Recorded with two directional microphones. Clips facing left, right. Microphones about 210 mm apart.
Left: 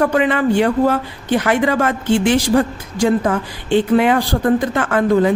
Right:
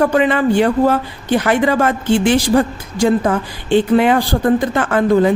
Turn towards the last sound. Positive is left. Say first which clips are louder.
# right 1 dB
turn(degrees=-30)  # may be behind; listen again after turning